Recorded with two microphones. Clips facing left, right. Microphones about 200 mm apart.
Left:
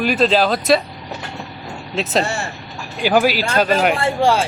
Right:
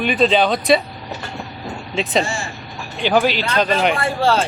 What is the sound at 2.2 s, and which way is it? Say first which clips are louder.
Speech: left 2 dB; 65° left (ahead or behind).